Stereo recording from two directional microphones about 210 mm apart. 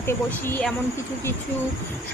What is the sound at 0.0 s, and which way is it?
Speech, 10° left (ahead or behind).